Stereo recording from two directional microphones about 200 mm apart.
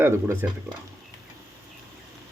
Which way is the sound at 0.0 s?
10° right (ahead or behind).